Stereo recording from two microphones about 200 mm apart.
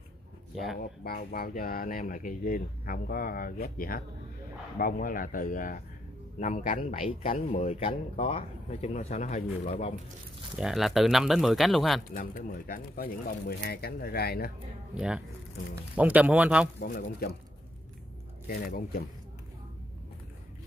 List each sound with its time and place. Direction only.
1.0 s speech: 50° left (ahead or behind)
6.9 s speech: 30° left (ahead or behind)
10.5 s speech: centre (ahead or behind)
12.1 s speech: 45° left (ahead or behind)
15.0 s speech: 5° right (ahead or behind)
16.8 s speech: 50° left (ahead or behind)
18.5 s speech: 45° left (ahead or behind)